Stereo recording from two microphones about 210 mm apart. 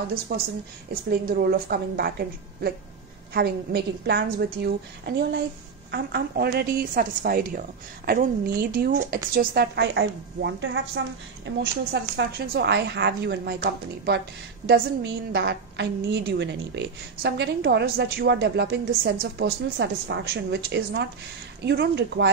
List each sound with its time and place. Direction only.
0.3 s a woman's voice: 50° right (ahead or behind)
15.3 s a woman's voice: 55° right (ahead or behind)